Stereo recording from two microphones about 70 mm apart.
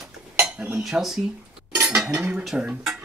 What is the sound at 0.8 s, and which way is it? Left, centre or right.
Speech, centre.